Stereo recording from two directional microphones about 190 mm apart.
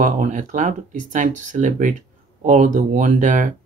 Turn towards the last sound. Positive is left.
turn(degrees=-45)  # may be behind; listen again after turning